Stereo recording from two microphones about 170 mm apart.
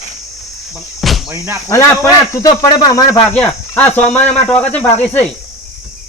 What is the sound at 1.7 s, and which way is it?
Speech, 20° left (ahead or behind).